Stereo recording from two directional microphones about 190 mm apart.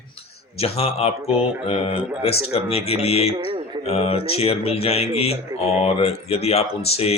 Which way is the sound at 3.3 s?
25° right (ahead or behind).